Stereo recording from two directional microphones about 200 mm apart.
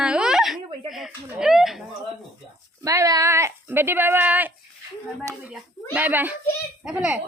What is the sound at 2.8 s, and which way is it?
Speech, 15° right (ahead or behind).